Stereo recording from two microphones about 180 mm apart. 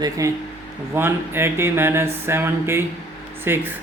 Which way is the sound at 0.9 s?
10° right (ahead or behind).